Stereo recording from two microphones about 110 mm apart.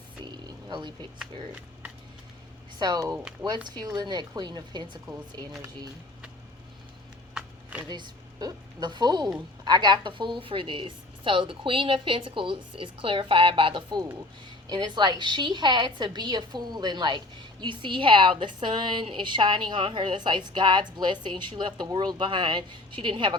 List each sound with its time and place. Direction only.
0.3 s a sound: 40° right (ahead or behind)
1.2 s speech: 10° right (ahead or behind)
2.7 s a woman's voice: 40° right (ahead or behind)
3.4 s speech: 20° right (ahead or behind)
3.8 s a woman's voice: 40° right (ahead or behind)
7.3 s a sound: 10° right (ahead or behind)
7.9 s a woman's voice: 40° right (ahead or behind)